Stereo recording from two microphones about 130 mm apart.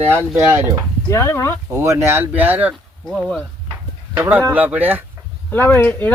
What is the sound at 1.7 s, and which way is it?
Speech, 20° right (ahead or behind).